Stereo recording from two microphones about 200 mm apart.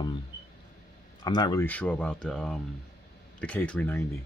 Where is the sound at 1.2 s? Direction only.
20° left (ahead or behind).